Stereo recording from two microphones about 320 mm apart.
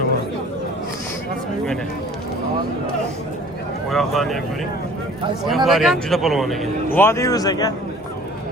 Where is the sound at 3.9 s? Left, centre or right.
Centre.